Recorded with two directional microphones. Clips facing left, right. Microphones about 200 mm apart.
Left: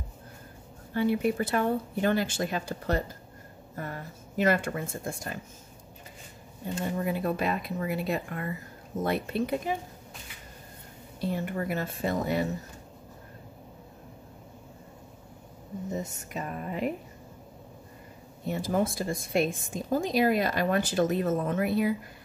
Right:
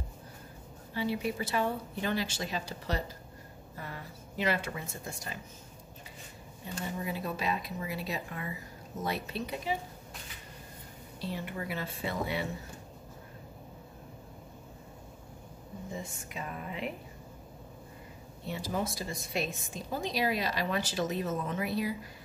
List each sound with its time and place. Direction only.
0.9 s a woman's voice: 55° left (ahead or behind)
6.7 s a woman's voice: 50° left (ahead or behind)
11.1 s a woman's voice: 50° left (ahead or behind)
15.9 s a woman's voice: 40° left (ahead or behind)
18.5 s a woman's voice: 50° left (ahead or behind)